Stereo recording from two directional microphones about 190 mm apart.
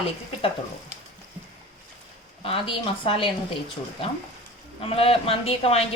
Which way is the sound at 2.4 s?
30° left (ahead or behind).